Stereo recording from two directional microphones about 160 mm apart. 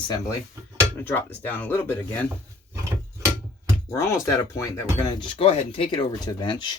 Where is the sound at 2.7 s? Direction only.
20° right (ahead or behind).